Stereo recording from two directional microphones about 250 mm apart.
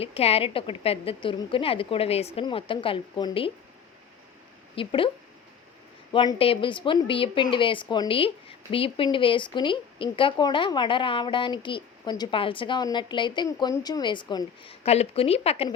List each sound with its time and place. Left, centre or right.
0.0 s a woman's voice: left
4.7 s speech: left
6.1 s a woman's voice: left